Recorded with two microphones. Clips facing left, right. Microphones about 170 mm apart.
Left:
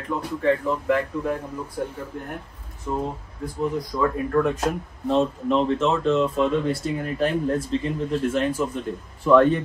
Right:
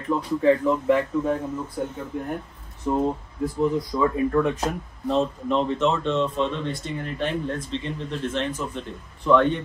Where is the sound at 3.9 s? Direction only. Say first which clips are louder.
Left 1 dB; centre (ahead or behind).